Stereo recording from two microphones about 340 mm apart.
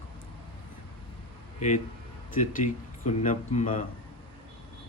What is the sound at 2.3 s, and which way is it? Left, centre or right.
Speech, left.